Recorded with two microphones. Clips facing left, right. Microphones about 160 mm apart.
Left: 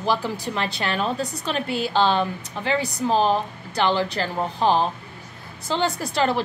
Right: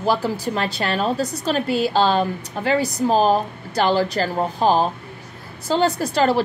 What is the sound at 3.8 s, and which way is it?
A woman's voice, 40° right (ahead or behind).